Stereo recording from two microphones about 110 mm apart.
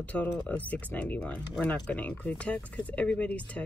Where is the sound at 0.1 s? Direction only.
15° left (ahead or behind).